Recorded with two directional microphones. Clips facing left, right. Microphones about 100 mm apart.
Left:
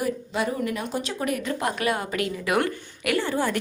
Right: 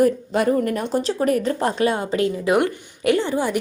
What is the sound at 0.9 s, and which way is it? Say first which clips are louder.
A woman's voice: right 8 dB; 35° right (ahead or behind).